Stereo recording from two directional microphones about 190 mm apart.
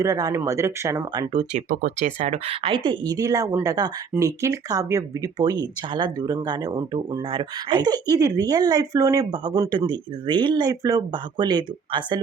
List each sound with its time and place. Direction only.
0.0 s speech: 15° right (ahead or behind)
1.3 s speech: 30° right (ahead or behind)
1.7 s speech: 45° right (ahead or behind); by 12.2 s 25° right (ahead or behind)